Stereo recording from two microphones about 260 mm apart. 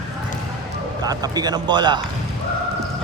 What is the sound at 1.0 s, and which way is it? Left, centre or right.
Speech, centre.